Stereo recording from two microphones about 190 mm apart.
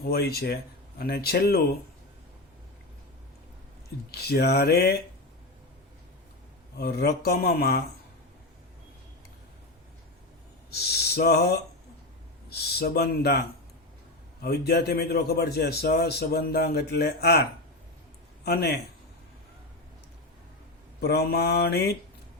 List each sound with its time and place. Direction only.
0.0 s a man's voice: 55° left (ahead or behind)
4.1 s a man's voice: 60° left (ahead or behind)
6.7 s a man's voice: 55° left (ahead or behind)
10.7 s a man's voice: 60° left (ahead or behind)
14.4 s a man's voice: 55° left (ahead or behind)
18.4 s a man's voice: 55° left (ahead or behind)
21.0 s a man's voice: 60° left (ahead or behind)